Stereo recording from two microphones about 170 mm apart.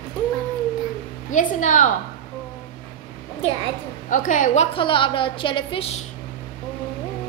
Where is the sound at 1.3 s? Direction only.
50° left (ahead or behind).